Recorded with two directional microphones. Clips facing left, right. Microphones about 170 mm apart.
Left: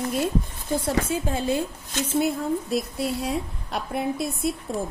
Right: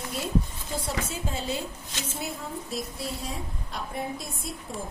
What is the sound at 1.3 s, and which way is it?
Speech, 55° left (ahead or behind).